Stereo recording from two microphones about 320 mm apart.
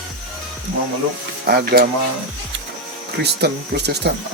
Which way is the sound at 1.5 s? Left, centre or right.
Right.